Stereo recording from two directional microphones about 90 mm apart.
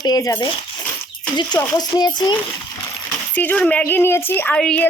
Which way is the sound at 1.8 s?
50° left (ahead or behind).